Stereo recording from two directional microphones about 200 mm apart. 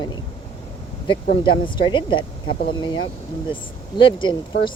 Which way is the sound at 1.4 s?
25° left (ahead or behind).